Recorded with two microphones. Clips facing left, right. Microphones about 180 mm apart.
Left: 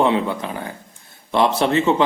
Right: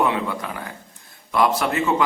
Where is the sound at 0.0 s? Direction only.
25° left (ahead or behind).